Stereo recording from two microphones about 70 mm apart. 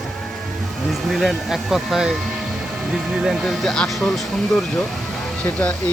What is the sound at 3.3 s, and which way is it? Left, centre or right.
Speech, centre.